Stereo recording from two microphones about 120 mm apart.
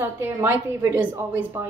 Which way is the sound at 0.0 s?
15° right (ahead or behind).